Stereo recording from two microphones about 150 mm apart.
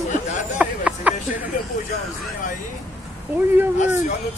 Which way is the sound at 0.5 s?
10° right (ahead or behind).